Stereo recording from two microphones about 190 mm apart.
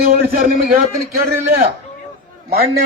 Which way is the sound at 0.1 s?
50° right (ahead or behind).